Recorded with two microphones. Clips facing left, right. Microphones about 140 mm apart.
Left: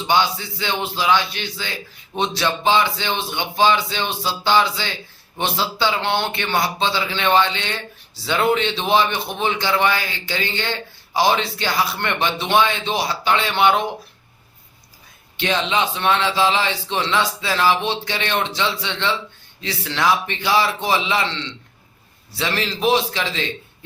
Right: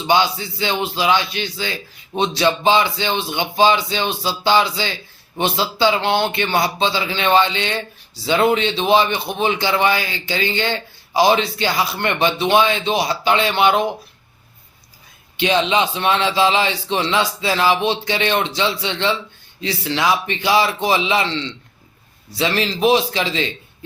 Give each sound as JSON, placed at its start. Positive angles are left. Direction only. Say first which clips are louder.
{"t": 0.6, "sound": "speech", "louder": "right 3 dB", "side_deg": -15}
{"t": 15.4, "sound": "speech", "louder": "right 4 dB", "side_deg": -15}
{"t": 22.3, "sound": "speech", "louder": "right 4 dB", "side_deg": -15}